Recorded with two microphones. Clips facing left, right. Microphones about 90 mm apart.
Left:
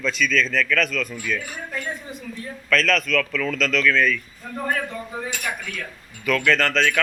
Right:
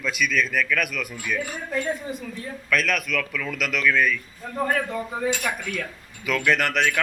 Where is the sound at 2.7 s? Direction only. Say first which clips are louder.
Left 4 dB; 10° right (ahead or behind).